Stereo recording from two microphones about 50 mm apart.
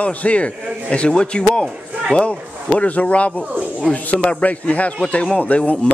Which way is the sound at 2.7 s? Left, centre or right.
Left.